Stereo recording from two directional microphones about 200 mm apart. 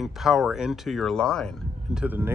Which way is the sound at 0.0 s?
Centre (ahead or behind).